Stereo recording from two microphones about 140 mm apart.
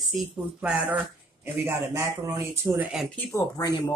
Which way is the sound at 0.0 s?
5° right (ahead or behind).